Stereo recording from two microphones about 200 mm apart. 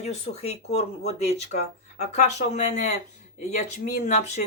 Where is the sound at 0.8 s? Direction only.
30° left (ahead or behind).